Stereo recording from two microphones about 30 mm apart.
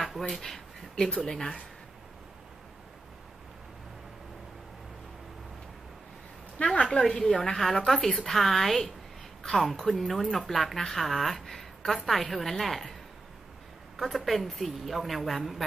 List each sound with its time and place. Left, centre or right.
0.0 s a sound: centre
0.9 s speech: left
1.2 s a woman's voice: centre
6.6 s a sound: left
7.0 s a woman's voice: centre
13.9 s a woman's voice: centre